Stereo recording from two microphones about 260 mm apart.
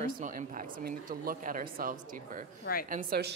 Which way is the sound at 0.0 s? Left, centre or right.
Right.